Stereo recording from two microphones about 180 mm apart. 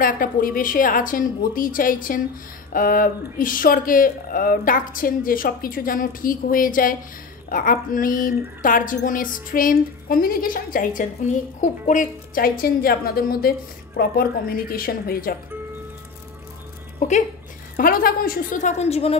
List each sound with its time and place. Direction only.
0.0 s speech: 50° left (ahead or behind)
17.7 s speech: 55° left (ahead or behind); by 19.1 s 35° left (ahead or behind)